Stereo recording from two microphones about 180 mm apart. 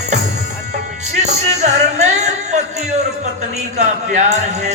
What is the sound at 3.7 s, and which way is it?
Speech, 40° right (ahead or behind).